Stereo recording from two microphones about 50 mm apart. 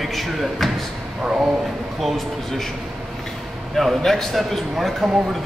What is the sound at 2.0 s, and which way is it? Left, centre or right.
Speech, centre.